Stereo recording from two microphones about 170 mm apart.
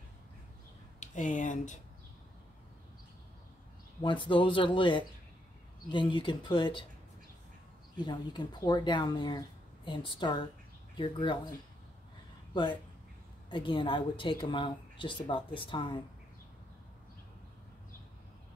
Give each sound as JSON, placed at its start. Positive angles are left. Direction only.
{"t": 0.9, "sound": "speech", "side_deg": 45}
{"t": 4.0, "sound": "a woman's voice", "side_deg": 30}
{"t": 8.0, "sound": "a woman's voice", "side_deg": 25}
{"t": 13.5, "sound": "a woman's voice", "side_deg": 30}